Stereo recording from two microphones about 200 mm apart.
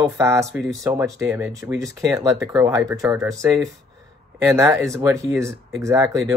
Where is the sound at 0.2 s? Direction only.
15° right (ahead or behind).